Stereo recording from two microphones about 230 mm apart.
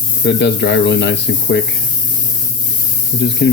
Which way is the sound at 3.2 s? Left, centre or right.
Left.